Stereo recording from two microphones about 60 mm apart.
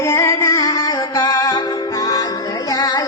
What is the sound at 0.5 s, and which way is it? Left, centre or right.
Music, left.